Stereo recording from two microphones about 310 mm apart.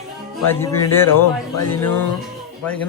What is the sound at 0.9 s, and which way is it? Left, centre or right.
A man's voice, centre.